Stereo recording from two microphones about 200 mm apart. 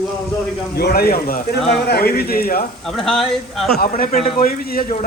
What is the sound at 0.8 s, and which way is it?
Speech, 50° left (ahead or behind).